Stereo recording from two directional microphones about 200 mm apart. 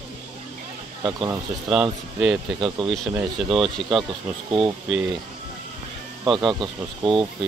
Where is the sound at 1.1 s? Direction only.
20° right (ahead or behind).